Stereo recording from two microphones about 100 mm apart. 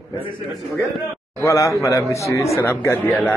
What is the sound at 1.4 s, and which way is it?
Speech, 30° left (ahead or behind).